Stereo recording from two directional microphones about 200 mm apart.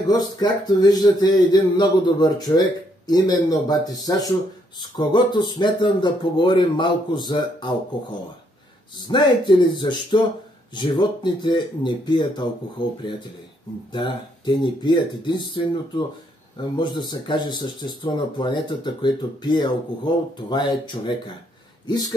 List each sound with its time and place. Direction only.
0.1 s speech: 20° left (ahead or behind)
9.0 s speech: 25° left (ahead or behind)
13.9 s speech: 20° left (ahead or behind)